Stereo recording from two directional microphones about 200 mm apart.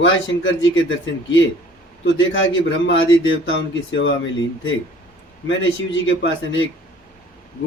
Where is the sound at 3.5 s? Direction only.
70° left (ahead or behind).